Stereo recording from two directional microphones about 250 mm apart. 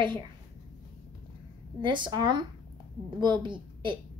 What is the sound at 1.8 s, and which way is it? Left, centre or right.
Speech, centre.